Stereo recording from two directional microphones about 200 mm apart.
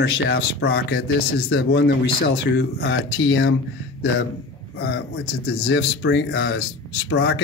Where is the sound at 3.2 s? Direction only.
65° left (ahead or behind).